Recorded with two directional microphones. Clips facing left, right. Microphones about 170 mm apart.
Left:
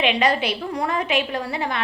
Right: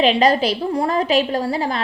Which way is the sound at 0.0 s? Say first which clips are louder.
Right 5 dB; 35° right (ahead or behind).